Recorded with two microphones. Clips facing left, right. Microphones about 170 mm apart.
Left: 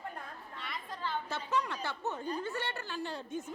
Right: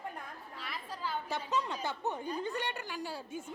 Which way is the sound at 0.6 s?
5° right (ahead or behind).